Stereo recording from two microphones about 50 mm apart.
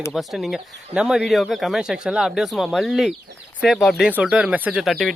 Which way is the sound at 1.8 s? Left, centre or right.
Centre.